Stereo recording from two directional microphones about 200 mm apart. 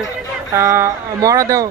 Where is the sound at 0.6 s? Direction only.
15° right (ahead or behind).